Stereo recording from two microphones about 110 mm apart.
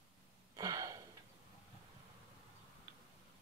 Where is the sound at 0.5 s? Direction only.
30° right (ahead or behind).